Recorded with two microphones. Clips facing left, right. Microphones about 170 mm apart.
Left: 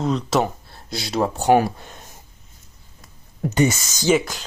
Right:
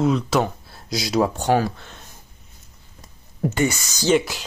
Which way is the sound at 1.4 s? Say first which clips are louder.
Left 3 dB; 15° left (ahead or behind).